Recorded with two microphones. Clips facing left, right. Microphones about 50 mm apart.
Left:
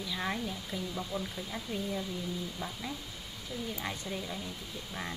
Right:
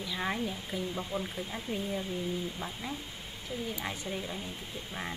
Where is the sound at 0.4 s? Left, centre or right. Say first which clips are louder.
Right 2 dB; centre.